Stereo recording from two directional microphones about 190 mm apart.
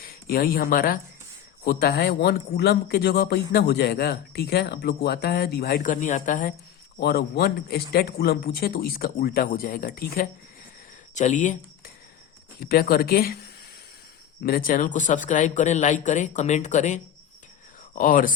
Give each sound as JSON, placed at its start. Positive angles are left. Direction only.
{"t": 0.0, "sound": "a man's voice", "side_deg": 50}
{"t": 7.0, "sound": "a man's voice", "side_deg": 60}
{"t": 12.5, "sound": "a man's voice", "side_deg": 50}
{"t": 14.4, "sound": "a man's voice", "side_deg": 50}